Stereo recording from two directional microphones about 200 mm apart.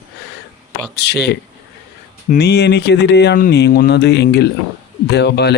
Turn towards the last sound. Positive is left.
turn(degrees=55)  # may be behind; listen again after turning